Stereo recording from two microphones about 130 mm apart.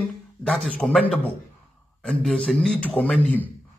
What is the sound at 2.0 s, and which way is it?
A man's voice, 5° left (ahead or behind).